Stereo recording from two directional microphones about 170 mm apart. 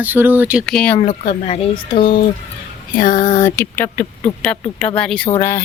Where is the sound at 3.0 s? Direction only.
50° left (ahead or behind).